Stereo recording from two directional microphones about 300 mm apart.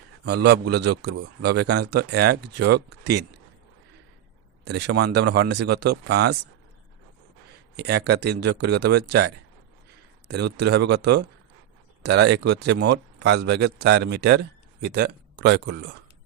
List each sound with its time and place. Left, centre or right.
0.4 s speech: right
4.6 s speech: right
7.8 s speech: right